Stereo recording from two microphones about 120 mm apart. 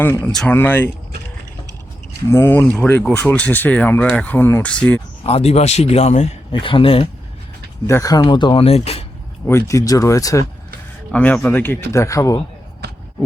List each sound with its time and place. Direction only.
0.0 s speech: 15° left (ahead or behind)
0.3 s speech: 5° left (ahead or behind)
0.5 s speech: 15° left (ahead or behind)
2.3 s speech: 20° left (ahead or behind)
5.2 s a man's voice: 55° left (ahead or behind)
6.5 s speech: 45° left (ahead or behind)
7.9 s speech: 25° left (ahead or behind); by 9.0 s 55° left (ahead or behind)
9.5 s speech: 25° left (ahead or behind)
11.1 s speech: 10° left (ahead or behind)